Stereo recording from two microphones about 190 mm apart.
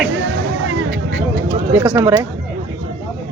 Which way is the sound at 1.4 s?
20° right (ahead or behind).